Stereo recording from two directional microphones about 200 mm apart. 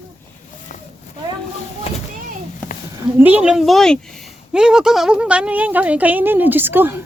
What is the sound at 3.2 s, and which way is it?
Speech, 10° right (ahead or behind).